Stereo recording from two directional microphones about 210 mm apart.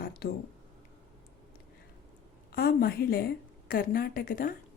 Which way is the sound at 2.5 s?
45° left (ahead or behind).